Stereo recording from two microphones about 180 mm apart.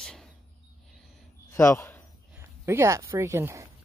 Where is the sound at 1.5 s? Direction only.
15° left (ahead or behind).